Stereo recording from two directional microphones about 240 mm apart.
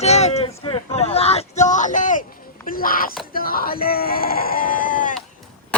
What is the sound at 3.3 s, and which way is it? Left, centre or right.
Speech, left.